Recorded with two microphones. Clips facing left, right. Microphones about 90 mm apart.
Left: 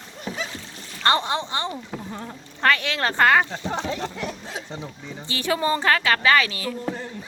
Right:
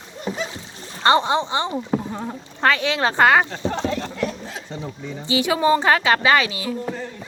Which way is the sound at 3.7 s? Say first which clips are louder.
Right 3 dB; 15° left (ahead or behind).